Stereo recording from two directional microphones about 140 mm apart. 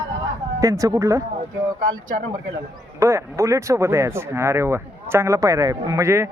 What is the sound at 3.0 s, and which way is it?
Speech, 20° right (ahead or behind).